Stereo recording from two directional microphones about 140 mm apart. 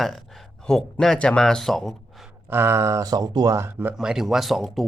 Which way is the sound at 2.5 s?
20° right (ahead or behind).